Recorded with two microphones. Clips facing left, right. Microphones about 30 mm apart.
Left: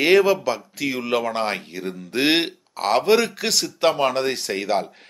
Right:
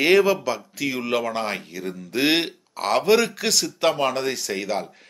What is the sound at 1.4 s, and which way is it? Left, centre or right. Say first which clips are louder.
Speech: left 3 dB; left.